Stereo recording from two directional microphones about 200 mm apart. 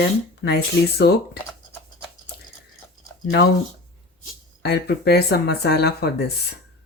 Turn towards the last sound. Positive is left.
turn(degrees=55)  # may be behind; listen again after turning